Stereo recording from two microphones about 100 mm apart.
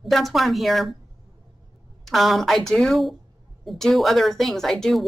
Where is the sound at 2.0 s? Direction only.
Centre (ahead or behind).